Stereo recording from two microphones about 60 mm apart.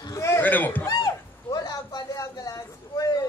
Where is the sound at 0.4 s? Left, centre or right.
Left.